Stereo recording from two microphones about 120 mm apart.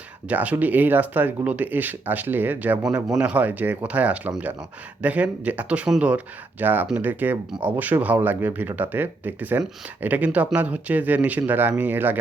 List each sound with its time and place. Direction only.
0.3 s speech: 15° right (ahead or behind)